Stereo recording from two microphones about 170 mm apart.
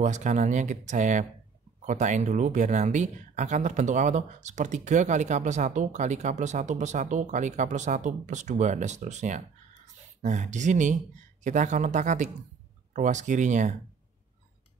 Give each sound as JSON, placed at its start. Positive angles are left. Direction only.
{"t": 0.0, "sound": "speech", "side_deg": -45}